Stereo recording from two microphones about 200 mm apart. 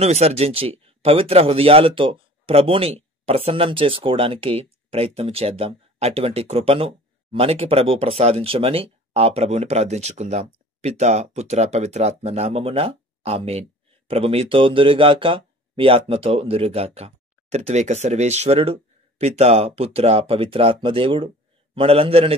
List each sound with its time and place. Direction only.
0.0 s a man's voice: 30° right (ahead or behind)